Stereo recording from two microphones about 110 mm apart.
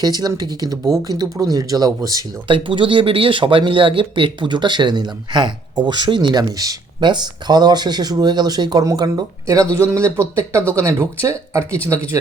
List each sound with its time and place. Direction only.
0.0 s speech: 35° right (ahead or behind)
2.5 s speech: 50° right (ahead or behind); by 11.8 s 25° right (ahead or behind)